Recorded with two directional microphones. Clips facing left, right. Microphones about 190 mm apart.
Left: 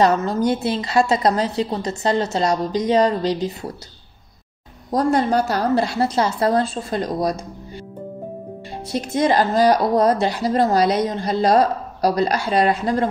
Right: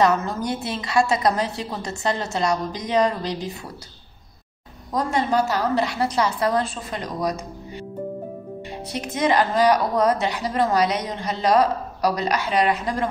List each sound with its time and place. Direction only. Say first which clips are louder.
0.0 s speech: left 3 dB; 35° left (ahead or behind)
4.9 s speech: left 4 dB; 35° left (ahead or behind)
8.9 s speech: left 3 dB; 30° left (ahead or behind)